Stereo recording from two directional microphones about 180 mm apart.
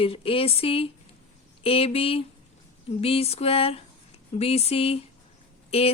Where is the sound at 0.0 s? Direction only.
30° left (ahead or behind).